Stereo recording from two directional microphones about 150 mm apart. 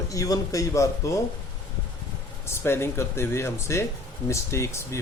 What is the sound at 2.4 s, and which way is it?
Speech, 15° left (ahead or behind).